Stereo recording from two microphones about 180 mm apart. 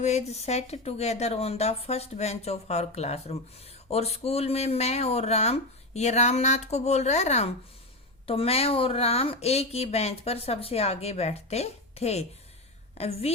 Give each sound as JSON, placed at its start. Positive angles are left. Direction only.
{"t": 0.0, "sound": "speech", "side_deg": 40}